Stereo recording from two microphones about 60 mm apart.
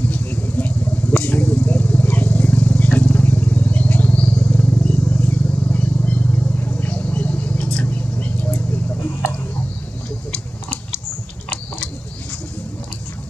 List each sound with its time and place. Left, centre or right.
0.1 s vehicle: left